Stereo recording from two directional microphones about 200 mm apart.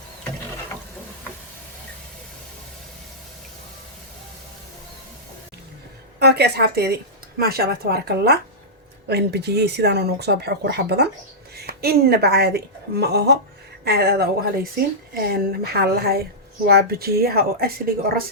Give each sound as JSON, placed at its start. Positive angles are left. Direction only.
{"t": 6.1, "sound": "a woman's voice", "side_deg": -55}